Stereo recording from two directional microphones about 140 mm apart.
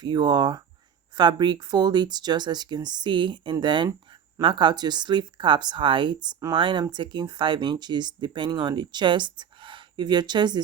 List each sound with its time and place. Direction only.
0.0 s speech: 30° right (ahead or behind)